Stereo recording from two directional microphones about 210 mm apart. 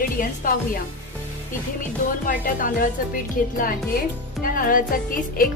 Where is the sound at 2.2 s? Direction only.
40° left (ahead or behind).